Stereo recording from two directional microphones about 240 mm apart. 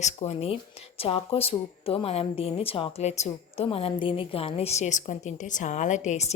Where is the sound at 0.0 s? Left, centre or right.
Left.